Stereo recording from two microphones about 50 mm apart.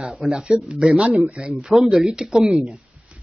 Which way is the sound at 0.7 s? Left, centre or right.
Centre.